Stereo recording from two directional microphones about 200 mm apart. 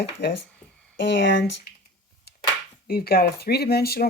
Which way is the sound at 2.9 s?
50° left (ahead or behind).